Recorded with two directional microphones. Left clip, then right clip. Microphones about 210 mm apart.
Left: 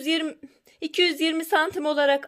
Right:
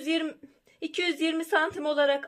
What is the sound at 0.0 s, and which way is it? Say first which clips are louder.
A woman's voice: left 3 dB; 35° left (ahead or behind).